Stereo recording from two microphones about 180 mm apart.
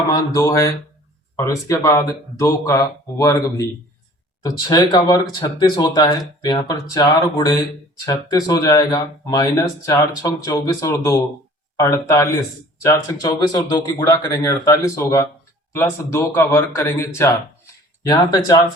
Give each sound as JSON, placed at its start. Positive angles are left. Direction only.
{"t": 0.1, "sound": "speech", "side_deg": 20}